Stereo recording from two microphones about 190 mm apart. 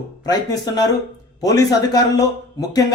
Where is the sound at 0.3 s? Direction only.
20° left (ahead or behind).